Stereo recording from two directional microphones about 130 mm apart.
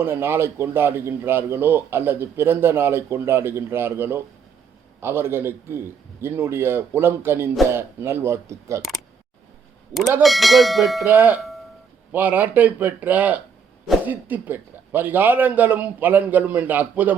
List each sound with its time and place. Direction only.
0.0 s a man's voice: 20° right (ahead or behind)
10.2 s speech: centre (ahead or behind)
11.0 s a man's voice: 15° right (ahead or behind)